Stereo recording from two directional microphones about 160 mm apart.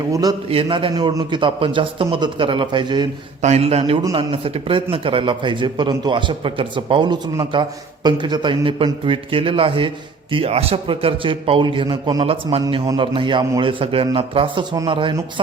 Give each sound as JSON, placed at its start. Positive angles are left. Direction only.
{"t": 0.1, "sound": "a man's voice", "side_deg": -25}
{"t": 3.4, "sound": "a man's voice", "side_deg": -40}